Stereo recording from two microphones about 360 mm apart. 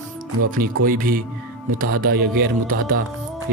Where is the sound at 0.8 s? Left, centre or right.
Right.